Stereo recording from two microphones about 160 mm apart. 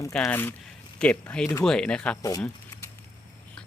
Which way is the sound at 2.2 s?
20° left (ahead or behind).